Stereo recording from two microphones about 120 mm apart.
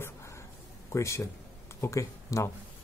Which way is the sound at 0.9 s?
25° left (ahead or behind).